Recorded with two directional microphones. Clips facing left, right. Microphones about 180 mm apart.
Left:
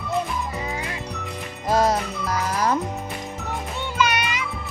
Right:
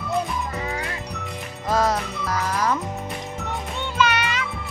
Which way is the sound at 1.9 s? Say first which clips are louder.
Left 1 dB; 30° left (ahead or behind).